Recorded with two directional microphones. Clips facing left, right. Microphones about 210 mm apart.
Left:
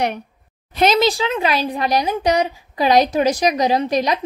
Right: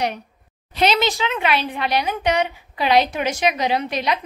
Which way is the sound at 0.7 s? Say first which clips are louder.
Left 4 dB; 40° left (ahead or behind).